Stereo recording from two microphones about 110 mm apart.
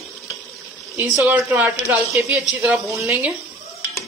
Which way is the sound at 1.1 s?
25° right (ahead or behind).